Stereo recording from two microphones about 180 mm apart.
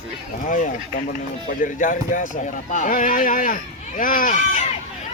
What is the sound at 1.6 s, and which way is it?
Speech, 50° left (ahead or behind).